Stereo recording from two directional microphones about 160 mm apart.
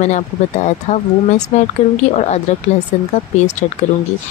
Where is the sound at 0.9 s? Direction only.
40° left (ahead or behind).